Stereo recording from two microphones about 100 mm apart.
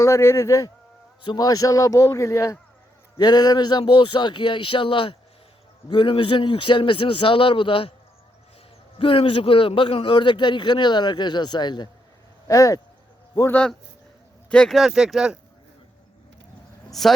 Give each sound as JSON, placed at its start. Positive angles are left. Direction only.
{"t": 0.0, "sound": "speech", "side_deg": 30}
{"t": 1.2, "sound": "a man's voice", "side_deg": 45}
{"t": 3.2, "sound": "a man's voice", "side_deg": 45}
{"t": 9.0, "sound": "a man's voice", "side_deg": 65}
{"t": 12.5, "sound": "a man's voice", "side_deg": 35}
{"t": 13.5, "sound": "speech", "side_deg": 10}
{"t": 16.9, "sound": "speech", "side_deg": 0}